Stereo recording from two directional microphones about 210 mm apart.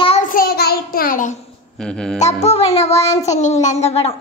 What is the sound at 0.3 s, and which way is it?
Child singing, 45° left (ahead or behind).